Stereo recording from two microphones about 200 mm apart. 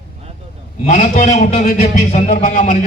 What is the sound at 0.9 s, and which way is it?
A man's voice, 40° left (ahead or behind).